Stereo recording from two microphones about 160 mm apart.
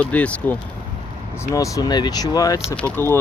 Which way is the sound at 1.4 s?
20° left (ahead or behind).